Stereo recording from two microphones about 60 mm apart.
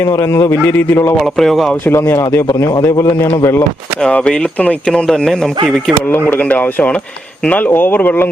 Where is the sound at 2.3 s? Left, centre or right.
Left.